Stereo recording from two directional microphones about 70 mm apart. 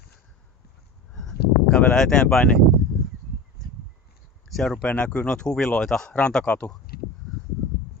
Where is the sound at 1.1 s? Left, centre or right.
Centre.